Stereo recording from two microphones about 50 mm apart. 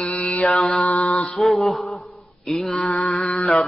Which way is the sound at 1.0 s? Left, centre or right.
Left.